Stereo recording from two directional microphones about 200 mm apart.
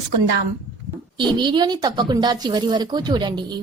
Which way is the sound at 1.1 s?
25° right (ahead or behind).